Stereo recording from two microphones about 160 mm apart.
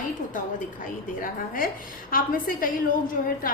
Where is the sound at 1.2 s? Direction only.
60° left (ahead or behind).